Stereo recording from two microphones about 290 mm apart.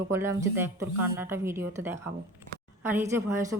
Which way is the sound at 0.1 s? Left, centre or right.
Centre.